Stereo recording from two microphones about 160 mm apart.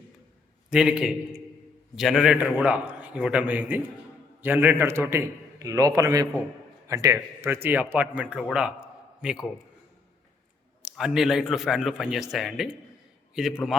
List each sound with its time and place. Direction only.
0.7 s a man's voice: 5° right (ahead or behind)
10.8 s a man's voice: 5° right (ahead or behind)